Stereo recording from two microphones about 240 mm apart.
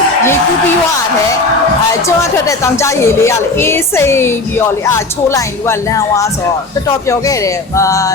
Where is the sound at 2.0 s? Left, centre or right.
Centre.